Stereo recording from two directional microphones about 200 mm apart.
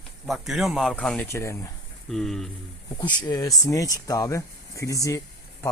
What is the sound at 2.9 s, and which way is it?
Speech, 20° left (ahead or behind).